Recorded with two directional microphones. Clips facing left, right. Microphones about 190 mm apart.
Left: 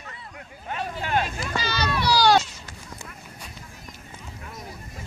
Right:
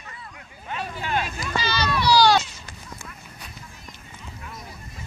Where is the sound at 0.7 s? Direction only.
45° left (ahead or behind).